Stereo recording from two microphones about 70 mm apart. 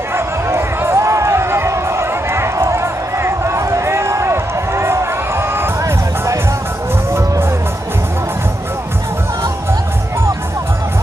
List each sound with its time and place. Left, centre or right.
0.1 s run: right
5.8 s music: right